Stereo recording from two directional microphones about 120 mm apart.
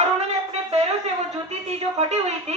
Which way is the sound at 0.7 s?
65° right (ahead or behind).